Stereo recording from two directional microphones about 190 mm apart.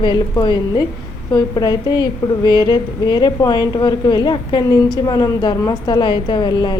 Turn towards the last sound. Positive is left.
turn(degrees=25)  # may be behind; listen again after turning